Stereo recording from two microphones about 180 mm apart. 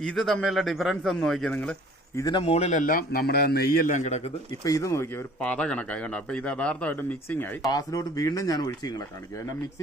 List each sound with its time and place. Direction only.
0.0 s a man's voice: 5° left (ahead or behind)
2.1 s speech: 20° left (ahead or behind)
2.4 s a man's voice: 35° left (ahead or behind)
4.6 s speech: 20° left (ahead or behind)
7.7 s speech: 20° left (ahead or behind)